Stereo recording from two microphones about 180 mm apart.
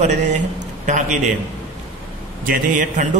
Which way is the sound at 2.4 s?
50° right (ahead or behind).